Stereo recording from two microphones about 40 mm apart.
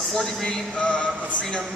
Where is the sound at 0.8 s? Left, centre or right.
Left.